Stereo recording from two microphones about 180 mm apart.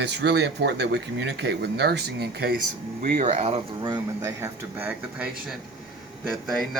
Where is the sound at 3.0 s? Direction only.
45° right (ahead or behind).